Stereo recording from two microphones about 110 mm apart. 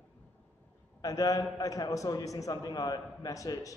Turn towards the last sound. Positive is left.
turn(degrees=30)  # may be behind; listen again after turning